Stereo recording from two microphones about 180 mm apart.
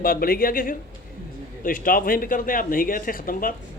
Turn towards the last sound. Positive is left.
turn(degrees=50)  # may be behind; listen again after turning